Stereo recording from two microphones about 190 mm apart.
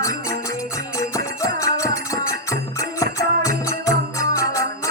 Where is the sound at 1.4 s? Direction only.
15° left (ahead or behind).